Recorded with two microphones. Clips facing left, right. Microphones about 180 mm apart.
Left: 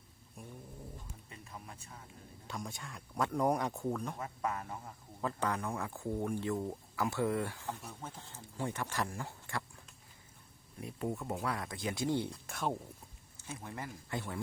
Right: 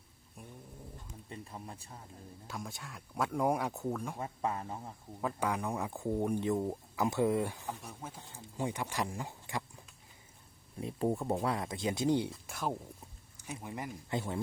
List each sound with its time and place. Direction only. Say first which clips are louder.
1.3 s a sound: right 6 dB; 30° right (ahead or behind)
2.5 s speech: left 1 dB; centre (ahead or behind)
4.2 s speech: right 2 dB; 30° right (ahead or behind)
5.2 s speech: right 1 dB; 10° right (ahead or behind)
10.8 s a sound: right 5 dB; 25° right (ahead or behind)
11.4 s speech: right 4 dB; 25° right (ahead or behind)
12.3 s speech: even; centre (ahead or behind)
13.3 s speech: right 2 dB; 15° right (ahead or behind)